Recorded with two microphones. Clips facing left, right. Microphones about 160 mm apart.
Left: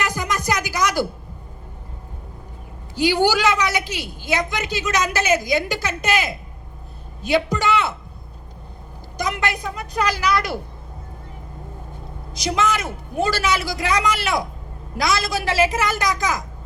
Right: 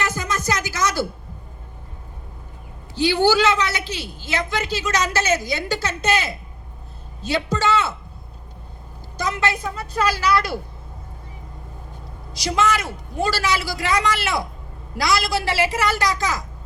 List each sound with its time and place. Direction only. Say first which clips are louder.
0.0 s music: left 1 dB; 15° left (ahead or behind)
2.9 s a woman's voice: right 1 dB; 15° left (ahead or behind)
9.1 s a woman's voice: right 1 dB; 15° left (ahead or behind)
12.3 s a man's voice: right 1 dB; 20° left (ahead or behind)